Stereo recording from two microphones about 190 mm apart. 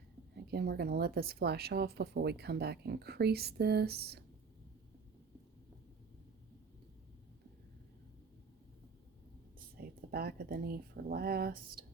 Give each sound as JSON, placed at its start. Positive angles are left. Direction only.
{"t": 0.4, "sound": "speech", "side_deg": -55}
{"t": 9.6, "sound": "speech", "side_deg": -55}